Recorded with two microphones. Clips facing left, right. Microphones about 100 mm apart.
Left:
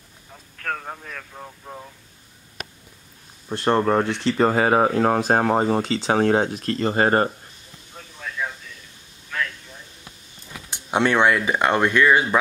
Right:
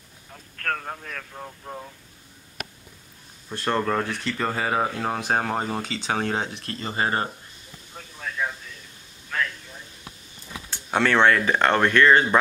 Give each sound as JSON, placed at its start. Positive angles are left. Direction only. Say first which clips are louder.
{"t": 0.3, "sound": "speech", "louder": "even", "side_deg": 5}
{"t": 3.4, "sound": "speech", "louder": "left 5 dB", "side_deg": 20}
{"t": 10.7, "sound": "speech", "louder": "left 2 dB", "side_deg": 15}